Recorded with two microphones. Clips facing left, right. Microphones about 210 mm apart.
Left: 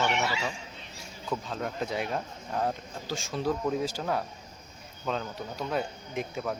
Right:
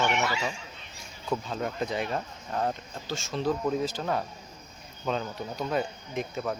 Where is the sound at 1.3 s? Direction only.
5° right (ahead or behind).